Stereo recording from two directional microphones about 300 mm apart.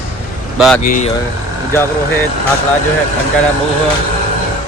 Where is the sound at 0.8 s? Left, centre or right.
Left.